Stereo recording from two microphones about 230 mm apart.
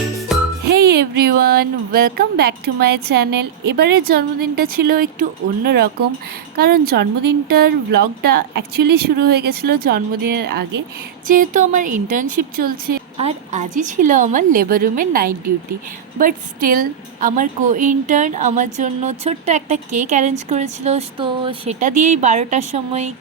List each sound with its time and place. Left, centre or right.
0.3 s music for children: centre
0.7 s speech: right
11.3 s a woman's voice: right